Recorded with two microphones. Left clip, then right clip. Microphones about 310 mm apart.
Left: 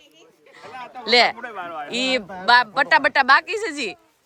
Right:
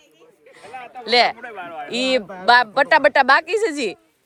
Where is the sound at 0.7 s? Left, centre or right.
Left.